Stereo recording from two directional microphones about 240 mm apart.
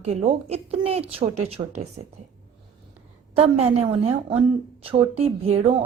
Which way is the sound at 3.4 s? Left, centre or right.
Right.